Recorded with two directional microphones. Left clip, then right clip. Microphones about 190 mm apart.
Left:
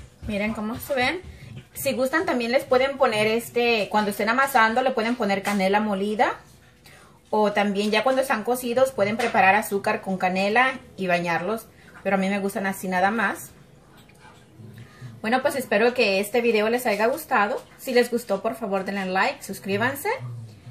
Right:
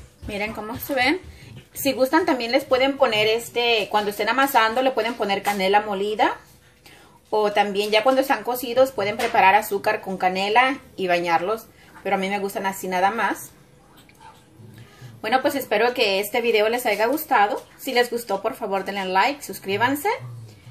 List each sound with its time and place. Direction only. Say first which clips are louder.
1.8 s speech: right 4 dB; 50° right (ahead or behind)
15.2 s speech: right 2 dB; 50° right (ahead or behind)